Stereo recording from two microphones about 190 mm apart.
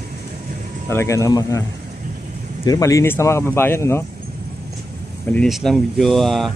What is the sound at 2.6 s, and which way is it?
Speech, 20° left (ahead or behind).